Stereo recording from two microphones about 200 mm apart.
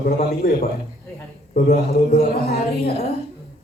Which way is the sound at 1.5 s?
45° left (ahead or behind).